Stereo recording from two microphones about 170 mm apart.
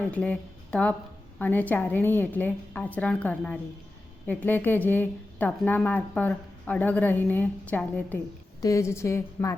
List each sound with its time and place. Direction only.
0.1 s a woman's voice: 5° left (ahead or behind)